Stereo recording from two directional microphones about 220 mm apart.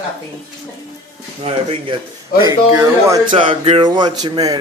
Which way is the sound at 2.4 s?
15° right (ahead or behind).